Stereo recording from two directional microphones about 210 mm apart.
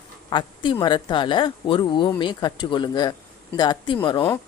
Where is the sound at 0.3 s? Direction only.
20° left (ahead or behind).